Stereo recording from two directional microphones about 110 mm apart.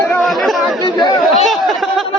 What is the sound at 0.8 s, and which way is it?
Chatter, 40° left (ahead or behind).